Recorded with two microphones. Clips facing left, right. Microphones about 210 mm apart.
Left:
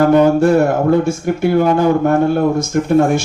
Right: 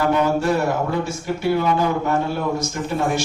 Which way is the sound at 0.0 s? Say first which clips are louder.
Left 9 dB; 50° left (ahead or behind).